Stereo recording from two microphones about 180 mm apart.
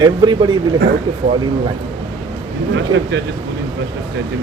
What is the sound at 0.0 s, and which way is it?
Speech, 25° right (ahead or behind).